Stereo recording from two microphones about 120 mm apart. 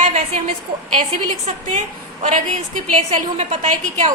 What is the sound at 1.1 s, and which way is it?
Speech, 65° right (ahead or behind).